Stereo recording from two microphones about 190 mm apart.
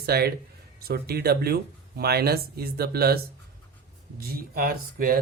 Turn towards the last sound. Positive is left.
turn(degrees=-50)  # may be behind; listen again after turning